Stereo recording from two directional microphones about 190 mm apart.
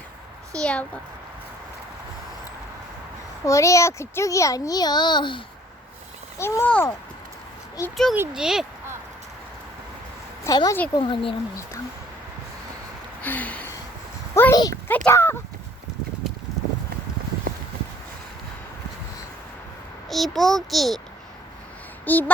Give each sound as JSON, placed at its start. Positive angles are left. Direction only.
{"t": 0.5, "sound": "a child's voice", "side_deg": 5}
{"t": 3.4, "sound": "a child's voice", "side_deg": 15}
{"t": 6.4, "sound": "a child's voice", "side_deg": 15}
{"t": 8.1, "sound": "a child's voice", "side_deg": -5}
{"t": 10.4, "sound": "a child's voice", "side_deg": 15}
{"t": 13.2, "sound": "a sound", "side_deg": 10}
{"t": 14.3, "sound": "a child's voice", "side_deg": 15}
{"t": 20.1, "sound": "a child's voice", "side_deg": 0}
{"t": 22.0, "sound": "speech", "side_deg": 10}